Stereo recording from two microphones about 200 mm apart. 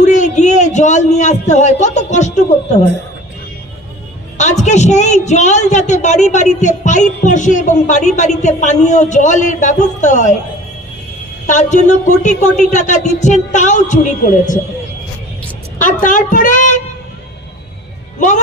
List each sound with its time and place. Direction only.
0.0 s a man's voice: 35° left (ahead or behind)
4.4 s a woman's voice: 35° left (ahead or behind)
11.4 s a woman's voice: 40° left (ahead or behind)
15.8 s a woman's voice: 40° left (ahead or behind)